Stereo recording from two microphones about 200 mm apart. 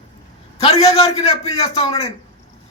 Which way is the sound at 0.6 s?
30° left (ahead or behind).